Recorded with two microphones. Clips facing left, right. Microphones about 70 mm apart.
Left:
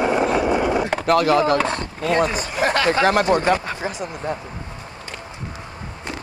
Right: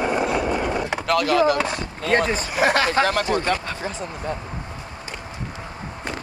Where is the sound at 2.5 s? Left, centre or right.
Centre.